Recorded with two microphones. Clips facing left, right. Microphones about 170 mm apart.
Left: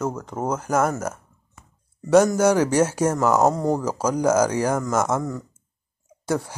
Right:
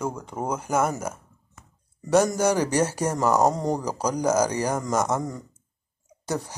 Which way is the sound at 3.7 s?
15° right (ahead or behind).